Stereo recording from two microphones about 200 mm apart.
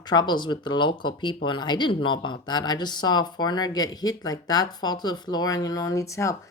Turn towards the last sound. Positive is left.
turn(degrees=15)  # may be behind; listen again after turning